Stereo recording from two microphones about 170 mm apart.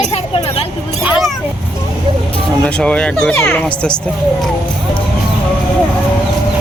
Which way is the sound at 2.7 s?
5° left (ahead or behind).